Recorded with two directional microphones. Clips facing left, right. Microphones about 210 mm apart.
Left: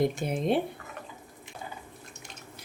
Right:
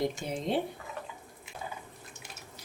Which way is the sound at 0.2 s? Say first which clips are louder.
Left 4 dB; 60° left (ahead or behind).